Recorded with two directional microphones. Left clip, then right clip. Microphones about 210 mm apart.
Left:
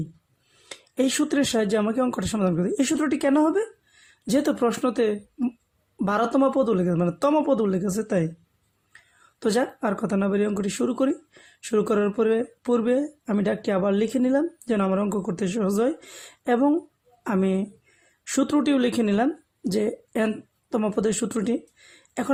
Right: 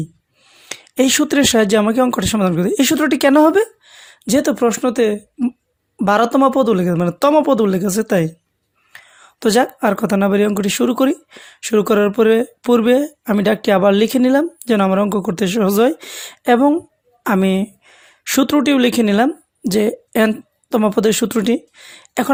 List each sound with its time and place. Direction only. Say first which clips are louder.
0.7 s speech: right 9 dB; 35° right (ahead or behind)